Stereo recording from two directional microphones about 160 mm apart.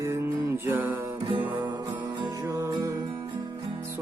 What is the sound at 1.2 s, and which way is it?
Music, 30° right (ahead or behind).